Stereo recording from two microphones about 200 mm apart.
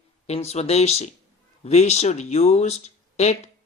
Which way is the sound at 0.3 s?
30° left (ahead or behind).